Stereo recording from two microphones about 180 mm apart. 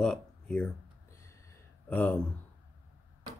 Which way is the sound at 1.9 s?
10° left (ahead or behind).